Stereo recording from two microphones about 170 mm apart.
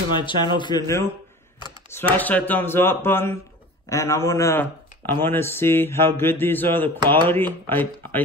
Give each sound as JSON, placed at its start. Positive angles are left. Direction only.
{"t": 0.1, "sound": "a man's voice", "side_deg": 25}
{"t": 1.6, "sound": "a sound", "side_deg": 15}
{"t": 2.1, "sound": "mantra", "side_deg": 10}
{"t": 3.9, "sound": "speech", "side_deg": 15}
{"t": 5.2, "sound": "mantra", "side_deg": 15}